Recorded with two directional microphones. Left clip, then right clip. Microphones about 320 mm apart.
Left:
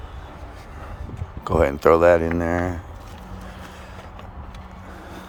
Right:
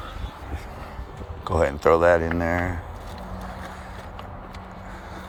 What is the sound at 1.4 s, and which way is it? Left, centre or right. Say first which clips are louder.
Speech: left 3 dB; centre.